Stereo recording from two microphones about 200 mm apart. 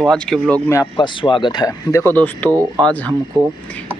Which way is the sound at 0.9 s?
25° left (ahead or behind).